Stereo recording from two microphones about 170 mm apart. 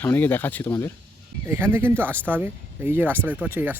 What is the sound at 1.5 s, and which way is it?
Speech, 10° right (ahead or behind).